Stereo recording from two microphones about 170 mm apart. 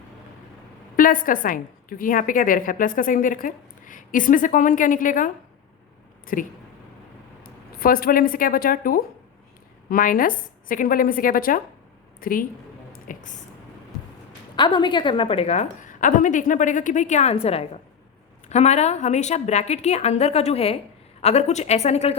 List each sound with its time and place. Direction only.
0.9 s a woman's voice: 55° left (ahead or behind)
6.3 s a woman's voice: 50° left (ahead or behind)
13.1 s a sound: 55° left (ahead or behind)
14.5 s a woman's voice: 25° left (ahead or behind)